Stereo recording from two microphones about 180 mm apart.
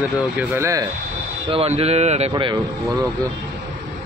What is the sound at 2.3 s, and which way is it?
Speech, 25° right (ahead or behind).